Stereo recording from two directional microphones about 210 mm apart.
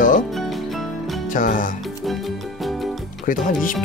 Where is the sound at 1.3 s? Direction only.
40° left (ahead or behind).